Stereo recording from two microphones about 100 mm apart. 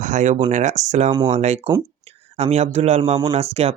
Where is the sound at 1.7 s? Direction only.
90° right.